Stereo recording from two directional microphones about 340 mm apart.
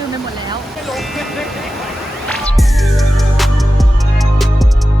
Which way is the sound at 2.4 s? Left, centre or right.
Centre.